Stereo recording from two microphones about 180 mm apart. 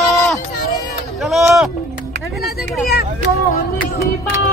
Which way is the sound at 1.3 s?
Centre (ahead or behind).